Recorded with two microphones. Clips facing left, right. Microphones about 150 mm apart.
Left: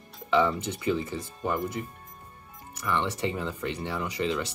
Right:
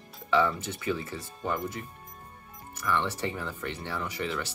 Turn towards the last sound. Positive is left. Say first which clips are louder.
# left 4 dB
turn(degrees=15)  # may be behind; listen again after turning